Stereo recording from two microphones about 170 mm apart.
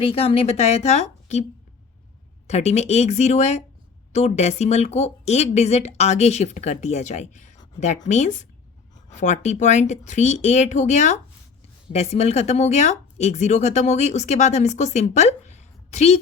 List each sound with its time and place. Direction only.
0.0 s speech: 35° left (ahead or behind)
2.5 s speech: 40° left (ahead or behind)